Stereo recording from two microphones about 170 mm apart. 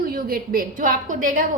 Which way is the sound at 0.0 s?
60° right (ahead or behind).